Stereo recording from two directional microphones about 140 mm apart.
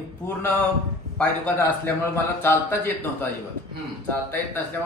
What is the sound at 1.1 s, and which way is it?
Speech, 10° left (ahead or behind).